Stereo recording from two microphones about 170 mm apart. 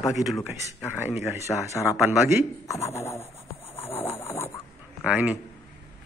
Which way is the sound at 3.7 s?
15° left (ahead or behind).